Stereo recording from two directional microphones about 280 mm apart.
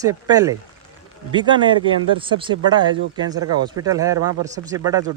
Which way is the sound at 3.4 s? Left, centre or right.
Right.